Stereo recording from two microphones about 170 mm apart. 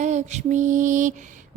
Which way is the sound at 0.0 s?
45° right (ahead or behind).